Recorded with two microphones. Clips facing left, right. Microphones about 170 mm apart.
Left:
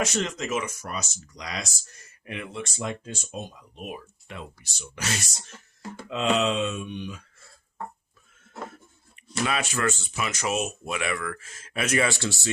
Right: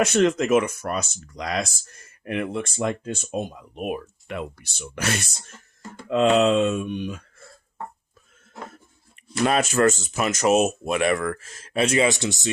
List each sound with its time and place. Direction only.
0.0 s speech: 60° right (ahead or behind)
9.4 s speech: 45° right (ahead or behind); by 12.5 s 20° right (ahead or behind)